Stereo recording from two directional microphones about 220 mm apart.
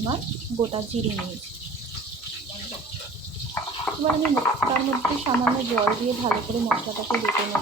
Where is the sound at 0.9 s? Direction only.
30° right (ahead or behind).